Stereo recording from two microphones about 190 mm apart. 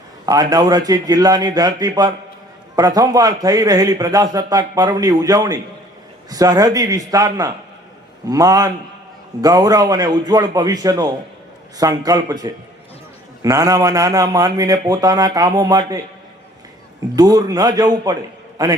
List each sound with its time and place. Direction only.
0.3 s a man's voice: 20° right (ahead or behind)
17.2 s a man's voice: 20° right (ahead or behind)